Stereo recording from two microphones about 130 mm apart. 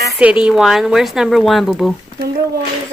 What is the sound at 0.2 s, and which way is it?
Speech, 10° right (ahead or behind).